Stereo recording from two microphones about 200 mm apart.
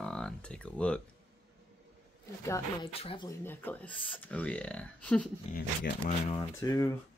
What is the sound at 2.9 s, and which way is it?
Speech, 30° left (ahead or behind).